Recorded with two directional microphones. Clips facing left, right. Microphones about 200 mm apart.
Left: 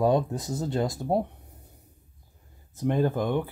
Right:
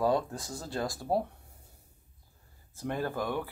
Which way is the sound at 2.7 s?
20° left (ahead or behind).